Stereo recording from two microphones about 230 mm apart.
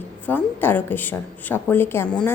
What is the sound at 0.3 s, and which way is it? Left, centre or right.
A woman's voice, centre.